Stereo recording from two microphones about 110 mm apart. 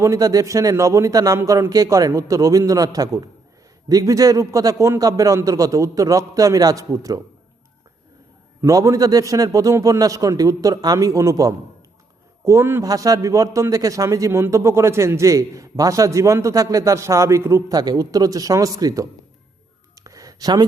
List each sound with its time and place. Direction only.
0.0 s a man's voice: 30° right (ahead or behind)
8.6 s a man's voice: 30° right (ahead or behind)
20.0 s a sound: 30° right (ahead or behind)